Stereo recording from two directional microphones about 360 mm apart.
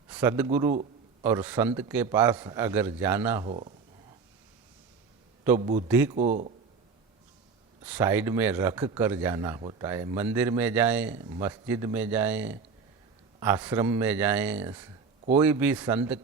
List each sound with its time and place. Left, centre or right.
0.1 s a man's voice: centre
5.4 s a man's voice: centre
6.1 s speech: centre
7.9 s speech: centre